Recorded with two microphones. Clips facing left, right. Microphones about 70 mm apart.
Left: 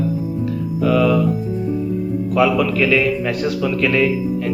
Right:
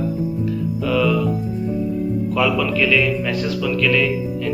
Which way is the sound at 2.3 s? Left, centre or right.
Centre.